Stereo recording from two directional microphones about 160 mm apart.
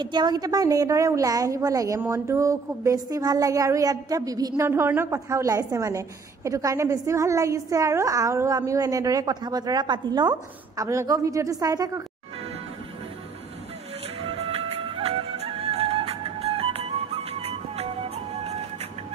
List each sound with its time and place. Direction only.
0.0 s a woman's voice: 25° right (ahead or behind)
14.2 s music: 35° right (ahead or behind)